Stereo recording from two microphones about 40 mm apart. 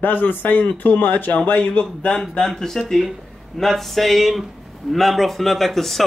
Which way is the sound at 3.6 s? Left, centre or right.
Centre.